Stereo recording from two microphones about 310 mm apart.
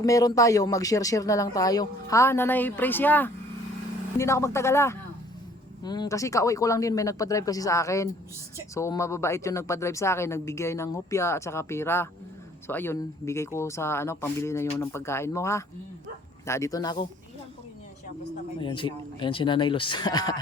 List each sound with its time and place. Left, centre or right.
0.0 s speech: centre
18.6 s speech: centre